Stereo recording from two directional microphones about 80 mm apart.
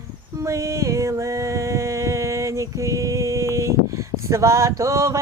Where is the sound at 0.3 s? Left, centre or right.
Right.